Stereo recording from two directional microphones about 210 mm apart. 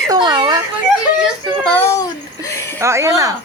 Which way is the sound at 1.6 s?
10° left (ahead or behind).